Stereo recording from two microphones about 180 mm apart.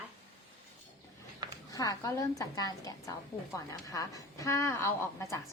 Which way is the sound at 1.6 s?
20° left (ahead or behind).